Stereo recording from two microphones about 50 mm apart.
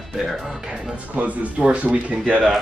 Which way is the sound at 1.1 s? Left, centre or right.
Right.